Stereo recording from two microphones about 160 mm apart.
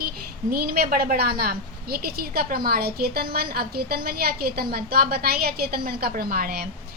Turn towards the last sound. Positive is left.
turn(degrees=-75)  # may be behind; listen again after turning